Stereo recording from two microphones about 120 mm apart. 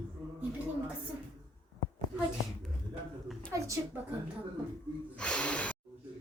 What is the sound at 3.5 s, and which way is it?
Speech, 25° right (ahead or behind).